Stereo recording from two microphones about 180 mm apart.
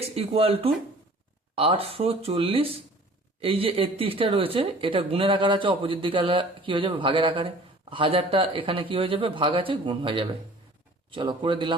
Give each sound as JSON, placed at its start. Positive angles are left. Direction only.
{"t": 0.2, "sound": "speech", "side_deg": -35}